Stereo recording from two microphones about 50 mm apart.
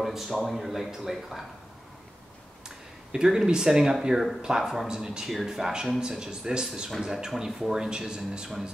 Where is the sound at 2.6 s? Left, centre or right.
Centre.